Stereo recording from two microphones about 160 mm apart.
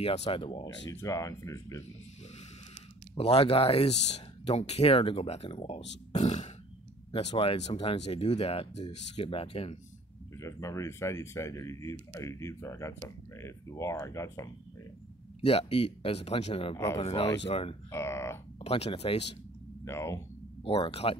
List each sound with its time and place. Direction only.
0.0 s speech: 40° left (ahead or behind)
0.8 s speech: 20° left (ahead or behind)
3.2 s speech: 35° left (ahead or behind)
6.1 s burping: 45° left (ahead or behind)
7.1 s speech: 40° left (ahead or behind)
10.3 s speech: 20° left (ahead or behind)
15.4 s speech: 35° left (ahead or behind)
16.7 s speech: 20° left (ahead or behind)
17.0 s speech: 40° left (ahead or behind)
17.9 s speech: 15° left (ahead or behind)
18.6 s speech: 35° left (ahead or behind)
19.8 s speech: 20° left (ahead or behind)
20.6 s speech: 35° left (ahead or behind)